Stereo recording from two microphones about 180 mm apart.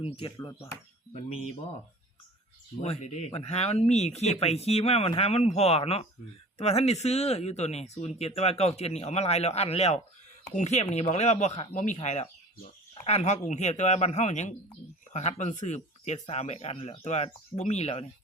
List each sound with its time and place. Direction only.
0.0 s speech: 30° left (ahead or behind)
2.8 s speech: 35° left (ahead or behind)